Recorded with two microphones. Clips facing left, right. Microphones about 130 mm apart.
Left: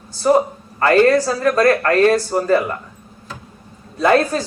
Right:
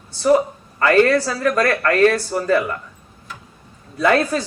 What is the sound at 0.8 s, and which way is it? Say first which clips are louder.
Speech: left 2 dB; 35° left (ahead or behind).